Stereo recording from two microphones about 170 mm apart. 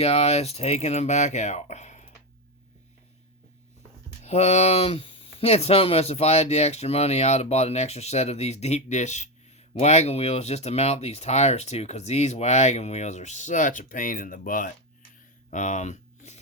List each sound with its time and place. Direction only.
0.0 s speech: 35° left (ahead or behind)
4.2 s speech: 40° left (ahead or behind)
15.4 s a sound: 45° left (ahead or behind)